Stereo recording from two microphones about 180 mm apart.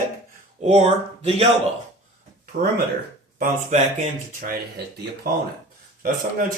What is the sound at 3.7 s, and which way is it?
Speech, 40° right (ahead or behind).